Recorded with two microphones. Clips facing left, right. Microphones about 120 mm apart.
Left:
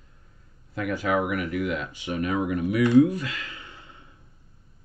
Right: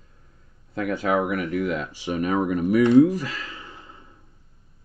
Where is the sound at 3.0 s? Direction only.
35° right (ahead or behind).